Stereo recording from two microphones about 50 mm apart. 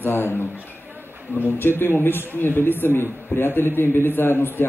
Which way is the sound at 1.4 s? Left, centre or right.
Left.